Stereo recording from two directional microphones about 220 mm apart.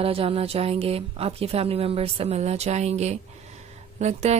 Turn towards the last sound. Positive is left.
turn(degrees=-30)  # may be behind; listen again after turning